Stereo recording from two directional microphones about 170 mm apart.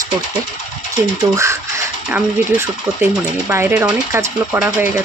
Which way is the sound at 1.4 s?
15° right (ahead or behind).